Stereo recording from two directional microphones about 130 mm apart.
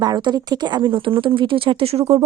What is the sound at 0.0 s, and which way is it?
Speech, 30° right (ahead or behind).